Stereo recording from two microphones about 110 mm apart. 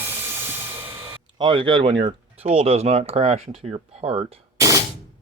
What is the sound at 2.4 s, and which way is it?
Speech, 70° right (ahead or behind).